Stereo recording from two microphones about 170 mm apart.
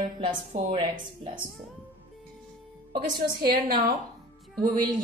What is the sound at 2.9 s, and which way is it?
Speech, 60° right (ahead or behind).